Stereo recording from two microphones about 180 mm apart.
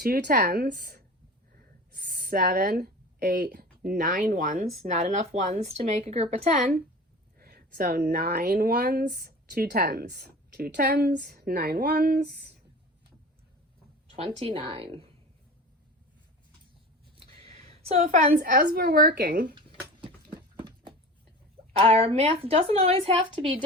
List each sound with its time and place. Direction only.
0.0 s speech: 55° right (ahead or behind)
1.5 s a sound: 60° right (ahead or behind)
3.4 s speech: 60° right (ahead or behind); by 6.8 s 45° right (ahead or behind)
7.3 s speech: 60° right (ahead or behind)
14.2 s a woman's voice: 35° right (ahead or behind)
17.2 s a woman's voice: 30° right (ahead or behind); by 19.5 s 65° right (ahead or behind)
20.6 s a sound: 25° right (ahead or behind)
21.8 s a woman's voice: 35° right (ahead or behind)